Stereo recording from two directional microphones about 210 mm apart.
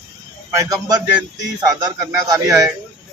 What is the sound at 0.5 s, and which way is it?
Speech, 15° right (ahead or behind).